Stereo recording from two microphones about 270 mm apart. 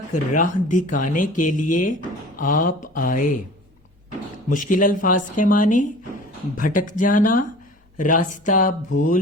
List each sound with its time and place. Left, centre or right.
0.1 s speech: left
4.4 s speech: left